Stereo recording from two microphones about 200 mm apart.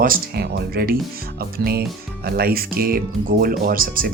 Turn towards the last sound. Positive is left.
turn(degrees=-45)  # may be behind; listen again after turning